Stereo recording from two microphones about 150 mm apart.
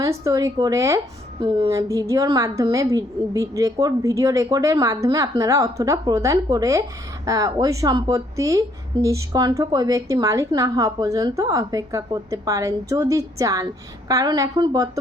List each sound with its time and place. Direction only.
0.0 s speech: 20° right (ahead or behind)
1.4 s speech: 35° right (ahead or behind)
1.7 s speech: 20° right (ahead or behind)